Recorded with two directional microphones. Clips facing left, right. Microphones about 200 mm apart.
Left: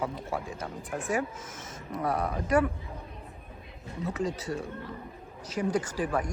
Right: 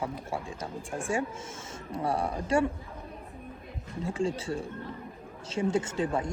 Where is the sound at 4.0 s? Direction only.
30° right (ahead or behind).